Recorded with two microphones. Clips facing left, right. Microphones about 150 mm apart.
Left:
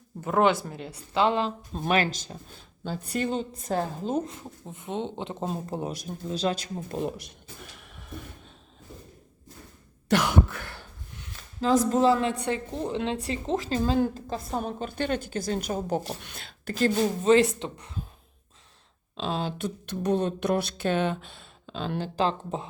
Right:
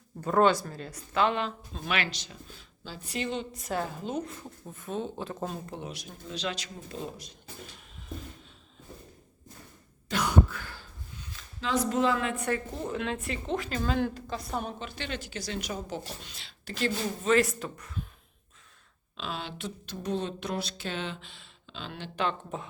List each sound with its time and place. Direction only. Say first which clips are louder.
0.3 s speech: left 1 dB; 15° left (ahead or behind)
1.7 s a woman's voice: left 9 dB; 45° left (ahead or behind)
4.2 s speech: left 3 dB; 20° left (ahead or behind); by 6.9 s 45° left (ahead or behind)
6.9 s speech: left 7 dB; 70° left (ahead or behind)
7.8 s a sound: left 3 dB; 65° left (ahead or behind)
10.1 s throat clearing: left 3 dB; 80° left
11.6 s speech: left 6 dB; 40° left (ahead or behind)
12.5 s a woman's voice: left 2 dB; 20° left (ahead or behind); by 16.9 s 45° left (ahead or behind)
17.2 s speech: left 4 dB; 25° left (ahead or behind)
19.1 s a woman's voice: left 7 dB; 35° left (ahead or behind)